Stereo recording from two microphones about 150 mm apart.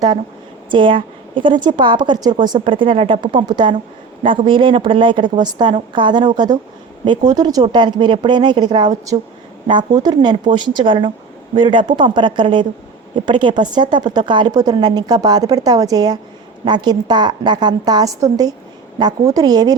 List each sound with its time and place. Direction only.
0.7 s a woman's voice: 35° right (ahead or behind)